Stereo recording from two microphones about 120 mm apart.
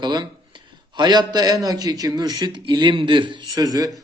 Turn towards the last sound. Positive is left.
turn(degrees=-30)  # may be behind; listen again after turning